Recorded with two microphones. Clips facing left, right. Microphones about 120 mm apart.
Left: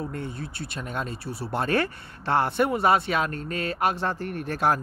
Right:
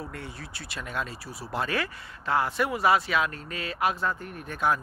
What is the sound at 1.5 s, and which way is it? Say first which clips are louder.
Speech: left 4 dB; 55° left (ahead or behind).